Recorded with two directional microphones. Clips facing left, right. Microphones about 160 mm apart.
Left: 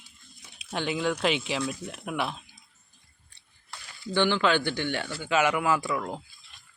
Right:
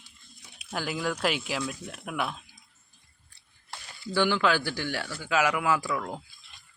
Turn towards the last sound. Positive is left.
turn(degrees=0)  # may be behind; listen again after turning